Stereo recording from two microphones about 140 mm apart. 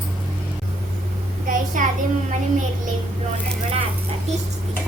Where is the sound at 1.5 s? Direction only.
70° right (ahead or behind).